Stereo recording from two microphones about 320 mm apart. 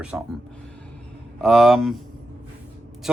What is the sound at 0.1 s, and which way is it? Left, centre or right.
Speech, centre.